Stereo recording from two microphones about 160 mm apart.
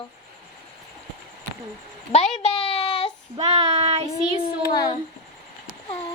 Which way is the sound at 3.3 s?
40° right (ahead or behind).